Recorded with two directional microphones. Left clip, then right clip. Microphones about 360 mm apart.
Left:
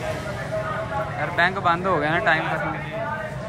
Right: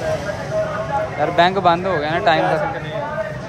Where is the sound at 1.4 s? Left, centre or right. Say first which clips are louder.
Right 5 dB; centre.